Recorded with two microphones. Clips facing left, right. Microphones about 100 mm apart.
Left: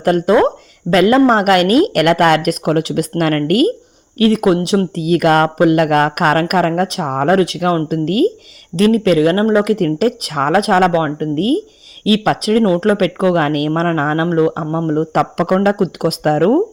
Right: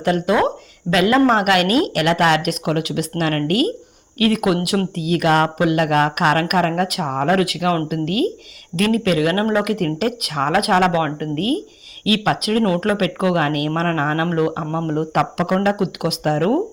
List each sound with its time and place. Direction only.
0.0 s speech: 45° left (ahead or behind)
1.9 s speech: 50° left (ahead or behind)
4.2 s speech: 35° left (ahead or behind)
4.9 s speech: 45° left (ahead or behind); by 9.7 s 30° left (ahead or behind)
9.7 s speech: 40° left (ahead or behind)